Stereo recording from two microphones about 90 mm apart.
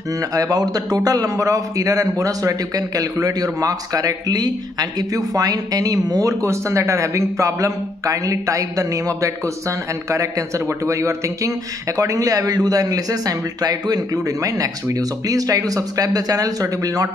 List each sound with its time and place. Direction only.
0.3 s a man's voice: 45° right (ahead or behind)